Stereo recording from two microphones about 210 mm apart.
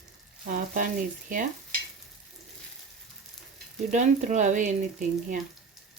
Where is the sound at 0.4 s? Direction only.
40° right (ahead or behind).